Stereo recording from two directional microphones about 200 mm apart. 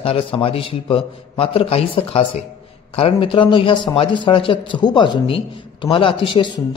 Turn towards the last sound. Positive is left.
turn(degrees=25)  # may be behind; listen again after turning